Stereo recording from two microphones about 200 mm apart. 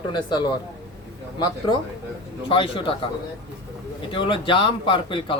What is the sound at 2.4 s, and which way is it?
Speech, 25° left (ahead or behind).